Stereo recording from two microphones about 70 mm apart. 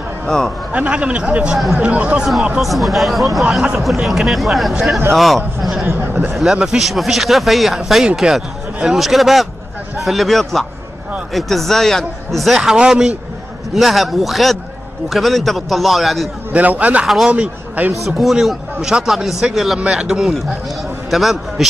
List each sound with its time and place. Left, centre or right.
0.7 s a man's voice: centre
2.6 s speech: centre
3.4 s a man's voice: centre
13.7 s speech: centre
16.5 s speech: right
17.0 s speech: centre
17.3 s speech: right
17.9 s a man's voice: centre